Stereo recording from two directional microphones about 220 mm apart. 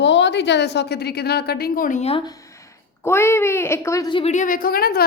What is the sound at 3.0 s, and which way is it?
A child's voice, 10° left (ahead or behind).